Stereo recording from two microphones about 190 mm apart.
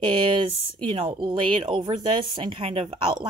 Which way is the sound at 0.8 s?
25° right (ahead or behind).